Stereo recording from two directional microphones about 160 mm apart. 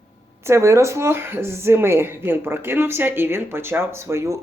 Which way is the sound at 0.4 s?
15° right (ahead or behind).